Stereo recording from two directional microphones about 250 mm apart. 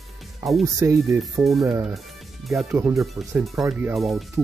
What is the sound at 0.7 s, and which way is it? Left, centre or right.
Speech, centre.